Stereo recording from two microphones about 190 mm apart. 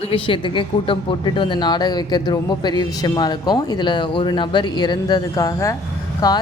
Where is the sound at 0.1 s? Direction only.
25° left (ahead or behind).